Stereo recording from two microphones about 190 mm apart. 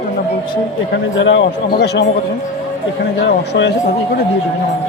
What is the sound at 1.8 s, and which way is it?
Speech, 60° left (ahead or behind).